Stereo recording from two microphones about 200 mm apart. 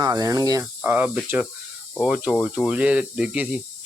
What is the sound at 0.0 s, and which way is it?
Speech, 20° right (ahead or behind).